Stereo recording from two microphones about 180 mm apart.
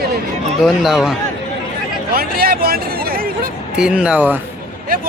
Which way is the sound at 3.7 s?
5° right (ahead or behind).